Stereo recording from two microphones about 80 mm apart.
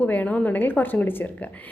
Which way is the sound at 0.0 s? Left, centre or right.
Centre.